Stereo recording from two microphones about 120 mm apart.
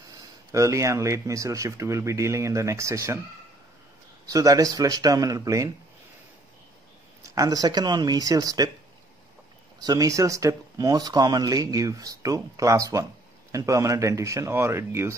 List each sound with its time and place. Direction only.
0.1 s speech: 25° right (ahead or behind)
4.3 s speech: 30° right (ahead or behind)
7.2 s speech: 30° right (ahead or behind)
9.8 s speech: 30° right (ahead or behind)